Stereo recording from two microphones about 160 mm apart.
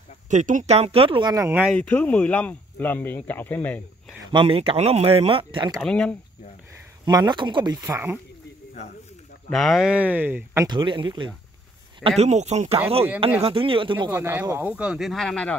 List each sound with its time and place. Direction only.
0.3 s speech: 50° right (ahead or behind); by 1.3 s 35° right (ahead or behind)
1.3 s speech: 20° right (ahead or behind)
1.8 s speech: 10° left (ahead or behind)
4.3 s speech: 35° right (ahead or behind)
5.8 s speech: 5° left (ahead or behind)
7.1 s speech: 25° right (ahead or behind)
9.5 s speech: centre (ahead or behind); by 11.3 s 30° right (ahead or behind)
12.2 s speech: 45° right (ahead or behind)
14.1 s speech: 15° right (ahead or behind); by 15.5 s 5° left (ahead or behind)